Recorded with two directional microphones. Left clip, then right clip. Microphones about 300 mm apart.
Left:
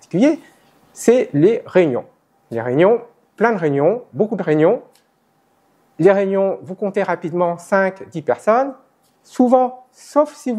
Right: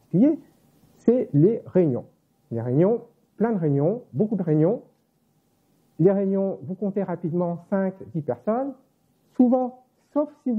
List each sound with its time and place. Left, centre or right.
0.1 s speech: centre
4.4 s speech: centre
5.9 s speech: centre